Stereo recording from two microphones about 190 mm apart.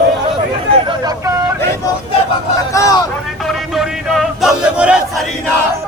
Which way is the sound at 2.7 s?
15° left (ahead or behind).